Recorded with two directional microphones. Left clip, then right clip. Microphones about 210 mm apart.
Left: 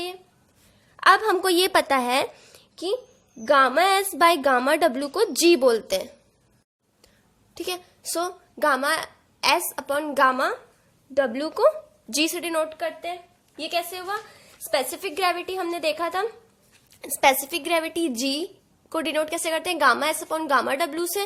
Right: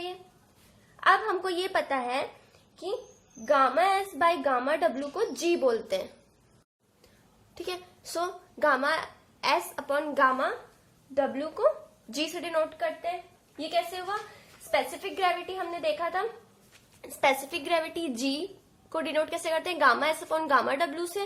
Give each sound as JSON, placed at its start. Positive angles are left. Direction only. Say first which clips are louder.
{"t": 0.9, "sound": "a woman's voice", "louder": "left 6 dB", "side_deg": 50}
{"t": 7.5, "sound": "a child's voice", "louder": "left 5 dB", "side_deg": 35}
{"t": 17.0, "sound": "a woman's voice", "louder": "left 6 dB", "side_deg": 40}